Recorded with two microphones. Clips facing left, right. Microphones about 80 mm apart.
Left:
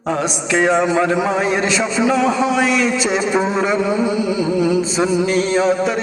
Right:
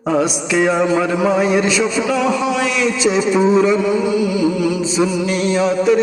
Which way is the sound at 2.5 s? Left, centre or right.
Left.